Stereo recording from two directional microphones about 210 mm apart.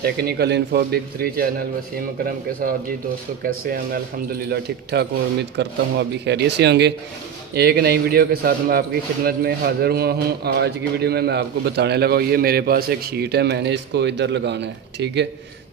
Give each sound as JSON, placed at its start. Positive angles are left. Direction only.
{"t": 0.0, "sound": "speech", "side_deg": -50}